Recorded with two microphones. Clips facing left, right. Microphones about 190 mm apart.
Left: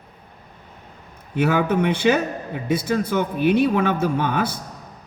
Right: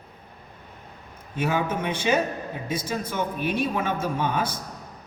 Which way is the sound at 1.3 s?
65° left (ahead or behind).